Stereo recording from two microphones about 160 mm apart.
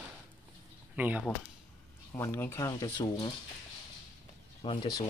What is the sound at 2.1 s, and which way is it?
Speech, 15° left (ahead or behind).